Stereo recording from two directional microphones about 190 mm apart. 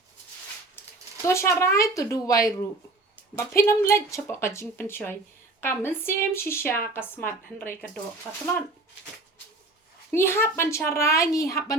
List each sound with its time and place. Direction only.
1.3 s a woman's voice: 15° left (ahead or behind)
10.1 s a woman's voice: 10° left (ahead or behind)